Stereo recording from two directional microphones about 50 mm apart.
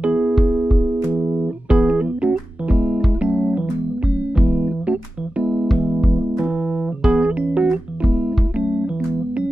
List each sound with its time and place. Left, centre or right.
0.0 s music: right
1.1 s music: centre
1.8 s music: right
5.4 s keyboard: right
7.1 s music: right